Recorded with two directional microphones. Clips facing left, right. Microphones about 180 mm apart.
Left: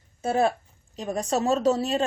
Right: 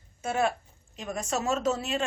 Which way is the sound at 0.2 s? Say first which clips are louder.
Left 4 dB; 35° left (ahead or behind).